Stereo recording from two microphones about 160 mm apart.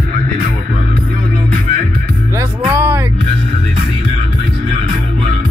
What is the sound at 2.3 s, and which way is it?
Music, 15° right (ahead or behind).